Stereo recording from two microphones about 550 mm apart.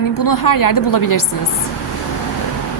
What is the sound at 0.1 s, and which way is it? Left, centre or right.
Speech, left.